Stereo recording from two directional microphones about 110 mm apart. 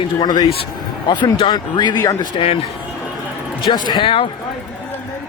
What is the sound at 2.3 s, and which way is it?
Speech, 55° left (ahead or behind).